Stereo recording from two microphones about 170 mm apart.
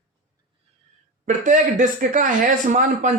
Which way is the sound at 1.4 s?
50° right (ahead or behind).